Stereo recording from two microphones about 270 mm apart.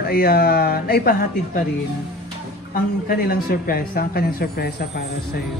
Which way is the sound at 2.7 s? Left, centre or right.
Left.